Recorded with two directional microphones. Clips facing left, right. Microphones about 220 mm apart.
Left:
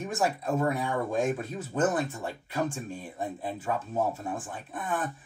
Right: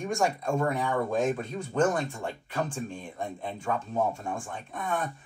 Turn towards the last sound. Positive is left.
turn(degrees=5)  # may be behind; listen again after turning